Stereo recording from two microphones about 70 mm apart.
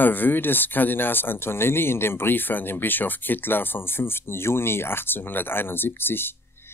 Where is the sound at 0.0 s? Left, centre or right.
Left.